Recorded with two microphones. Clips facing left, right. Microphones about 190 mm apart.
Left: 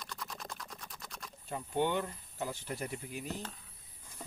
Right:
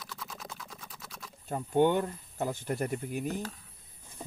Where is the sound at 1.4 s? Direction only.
50° right (ahead or behind).